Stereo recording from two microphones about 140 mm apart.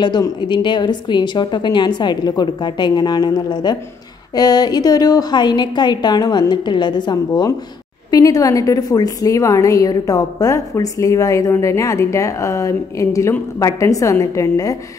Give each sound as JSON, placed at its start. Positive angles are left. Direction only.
{"t": 0.0, "sound": "a woman's voice", "side_deg": 30}